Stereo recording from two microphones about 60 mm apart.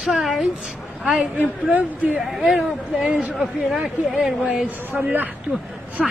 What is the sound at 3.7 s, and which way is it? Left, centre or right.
A woman's voice, centre.